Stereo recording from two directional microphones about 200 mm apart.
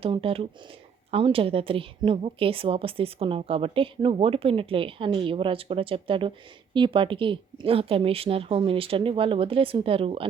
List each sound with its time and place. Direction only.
0.0 s a woman's voice: 25° right (ahead or behind)